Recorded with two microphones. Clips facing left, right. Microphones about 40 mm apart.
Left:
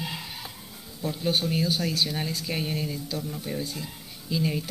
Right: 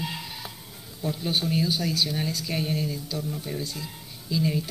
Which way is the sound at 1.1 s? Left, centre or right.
Centre.